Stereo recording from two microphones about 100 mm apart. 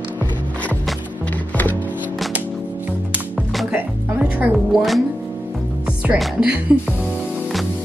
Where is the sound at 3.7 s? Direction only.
15° right (ahead or behind).